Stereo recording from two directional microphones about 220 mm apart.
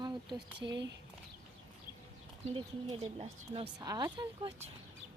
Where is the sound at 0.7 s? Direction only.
55° right (ahead or behind).